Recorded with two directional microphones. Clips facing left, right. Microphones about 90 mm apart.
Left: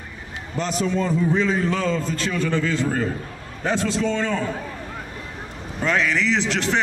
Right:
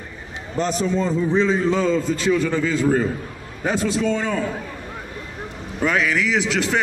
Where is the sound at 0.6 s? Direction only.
40° right (ahead or behind).